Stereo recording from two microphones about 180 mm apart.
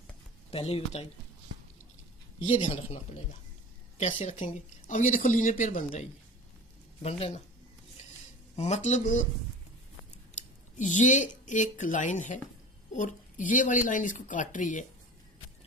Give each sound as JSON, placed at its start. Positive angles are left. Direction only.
{"t": 0.5, "sound": "speech", "side_deg": 35}
{"t": 2.6, "sound": "speech", "side_deg": 30}
{"t": 7.0, "sound": "speech", "side_deg": 35}
{"t": 8.5, "sound": "speech", "side_deg": 40}
{"t": 10.8, "sound": "speech", "side_deg": 45}